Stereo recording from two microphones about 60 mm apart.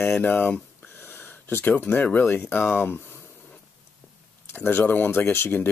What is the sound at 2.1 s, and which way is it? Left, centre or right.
Speech, left.